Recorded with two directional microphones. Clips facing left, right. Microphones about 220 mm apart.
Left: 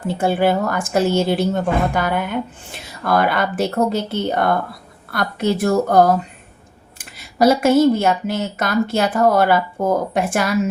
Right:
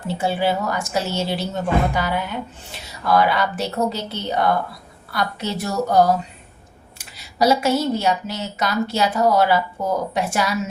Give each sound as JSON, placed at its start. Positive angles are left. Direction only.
{"t": 0.1, "sound": "speech", "side_deg": 55}